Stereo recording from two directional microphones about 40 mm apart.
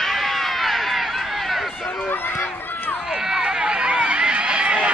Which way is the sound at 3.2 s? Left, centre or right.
Centre.